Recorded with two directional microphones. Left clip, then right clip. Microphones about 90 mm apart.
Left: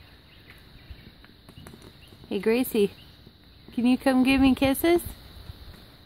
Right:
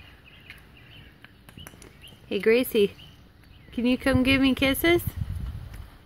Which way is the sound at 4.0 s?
20° left (ahead or behind).